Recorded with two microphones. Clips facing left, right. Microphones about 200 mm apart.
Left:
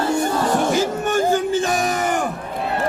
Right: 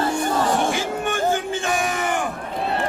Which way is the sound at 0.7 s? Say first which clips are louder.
Left 5 dB; 40° left (ahead or behind).